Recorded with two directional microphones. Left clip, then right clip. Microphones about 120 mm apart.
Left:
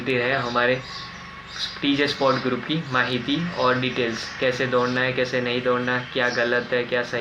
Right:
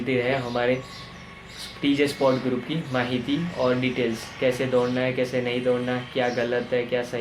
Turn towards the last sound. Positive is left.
turn(degrees=-40)  # may be behind; listen again after turning